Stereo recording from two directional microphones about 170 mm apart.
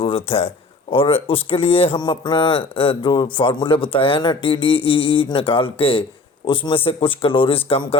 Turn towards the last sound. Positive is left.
turn(degrees=35)  # may be behind; listen again after turning